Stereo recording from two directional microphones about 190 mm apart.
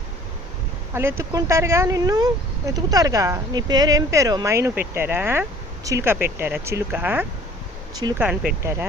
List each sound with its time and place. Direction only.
0.9 s speech: 15° right (ahead or behind)